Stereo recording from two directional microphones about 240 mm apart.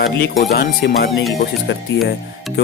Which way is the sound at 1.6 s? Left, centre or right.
Left.